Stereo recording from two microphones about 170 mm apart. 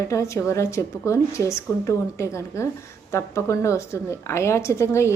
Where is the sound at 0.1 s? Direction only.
15° left (ahead or behind).